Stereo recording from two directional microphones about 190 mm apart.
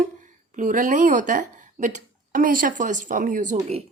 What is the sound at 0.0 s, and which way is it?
A woman's voice, 40° right (ahead or behind).